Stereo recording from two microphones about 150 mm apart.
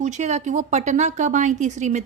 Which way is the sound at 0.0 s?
50° right (ahead or behind).